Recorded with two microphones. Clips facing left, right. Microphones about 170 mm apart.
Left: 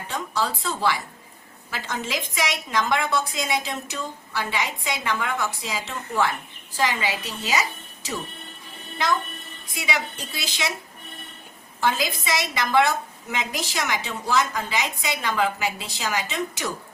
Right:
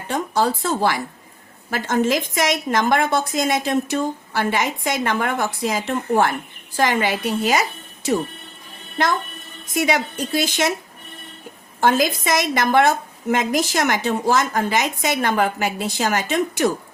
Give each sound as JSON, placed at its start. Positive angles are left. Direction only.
{"t": 0.1, "sound": "a woman's voice", "side_deg": -55}
{"t": 9.7, "sound": "a woman's voice", "side_deg": -50}
{"t": 11.8, "sound": "a woman's voice", "side_deg": -50}